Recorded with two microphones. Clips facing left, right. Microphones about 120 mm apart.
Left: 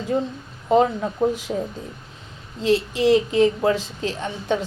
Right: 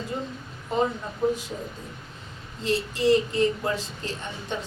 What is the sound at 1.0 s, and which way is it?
Speech, 80° left.